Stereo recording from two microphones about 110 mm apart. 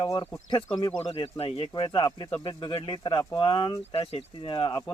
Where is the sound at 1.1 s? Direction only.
60° left (ahead or behind).